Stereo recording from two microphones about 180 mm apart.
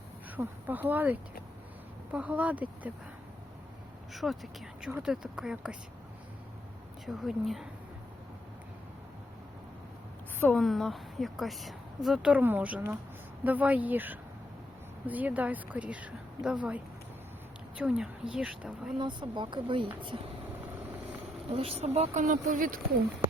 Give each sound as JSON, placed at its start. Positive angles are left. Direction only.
{"t": 0.3, "sound": "speech", "side_deg": -10}
{"t": 4.1, "sound": "a woman's voice", "side_deg": 0}
{"t": 7.0, "sound": "a woman's voice", "side_deg": 0}
{"t": 10.4, "sound": "a woman's voice", "side_deg": 5}
{"t": 18.9, "sound": "speech", "side_deg": -25}
{"t": 21.5, "sound": "speech", "side_deg": -35}